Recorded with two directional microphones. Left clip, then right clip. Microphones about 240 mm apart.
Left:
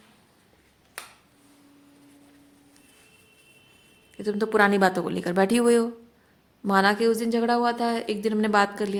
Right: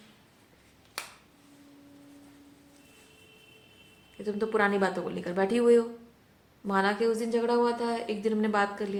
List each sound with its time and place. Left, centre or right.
4.2 s a woman's voice: left